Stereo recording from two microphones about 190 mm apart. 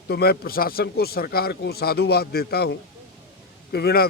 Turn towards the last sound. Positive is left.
turn(degrees=55)  # may be behind; listen again after turning